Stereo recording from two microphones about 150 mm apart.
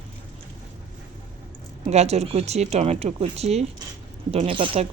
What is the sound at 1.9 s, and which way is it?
Speech, 45° right (ahead or behind).